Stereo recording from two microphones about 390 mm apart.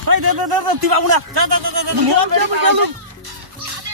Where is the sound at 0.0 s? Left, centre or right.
Right.